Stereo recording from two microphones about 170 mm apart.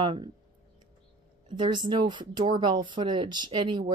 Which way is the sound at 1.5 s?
30° right (ahead or behind).